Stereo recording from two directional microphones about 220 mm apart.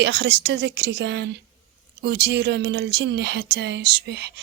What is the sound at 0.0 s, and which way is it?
Speech, 50° right (ahead or behind).